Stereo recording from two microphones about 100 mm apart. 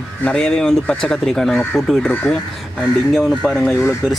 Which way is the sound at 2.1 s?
15° left (ahead or behind).